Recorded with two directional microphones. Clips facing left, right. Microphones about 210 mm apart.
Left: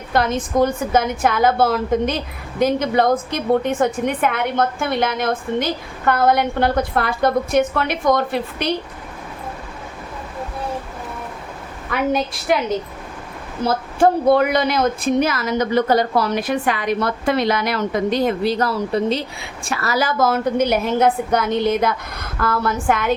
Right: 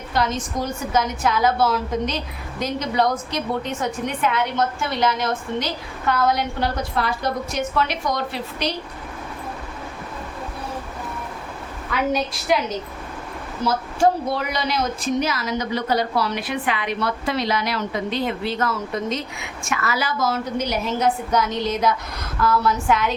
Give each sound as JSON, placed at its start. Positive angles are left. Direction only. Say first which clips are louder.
{"t": 0.1, "sound": "a woman's voice", "louder": "left 5 dB", "side_deg": 55}
{"t": 11.9, "sound": "a woman's voice", "louder": "left 3 dB", "side_deg": 55}
{"t": 13.7, "sound": "a woman's voice", "louder": "left 3 dB", "side_deg": 55}